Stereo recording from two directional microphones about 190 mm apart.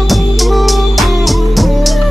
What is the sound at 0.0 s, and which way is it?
Music, centre (ahead or behind).